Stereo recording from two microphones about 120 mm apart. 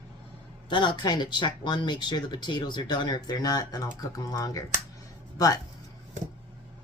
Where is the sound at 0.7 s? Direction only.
40° left (ahead or behind).